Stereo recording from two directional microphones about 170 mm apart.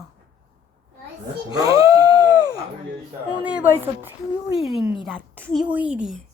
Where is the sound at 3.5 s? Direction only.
10° right (ahead or behind).